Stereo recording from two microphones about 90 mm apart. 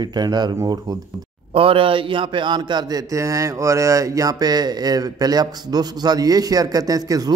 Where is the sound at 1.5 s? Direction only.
85° right; by 3.0 s 55° right (ahead or behind).